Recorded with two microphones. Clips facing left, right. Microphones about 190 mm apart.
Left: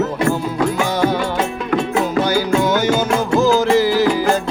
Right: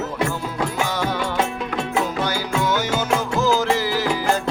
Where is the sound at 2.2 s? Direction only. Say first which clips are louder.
Left 6 dB; 15° left (ahead or behind).